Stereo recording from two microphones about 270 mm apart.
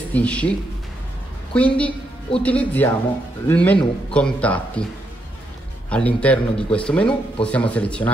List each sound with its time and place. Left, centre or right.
0.1 s a man's voice: centre
1.5 s a woman's voice: centre
5.9 s a man's voice: centre